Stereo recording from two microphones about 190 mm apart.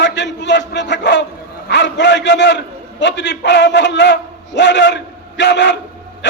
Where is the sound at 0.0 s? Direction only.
70° left (ahead or behind).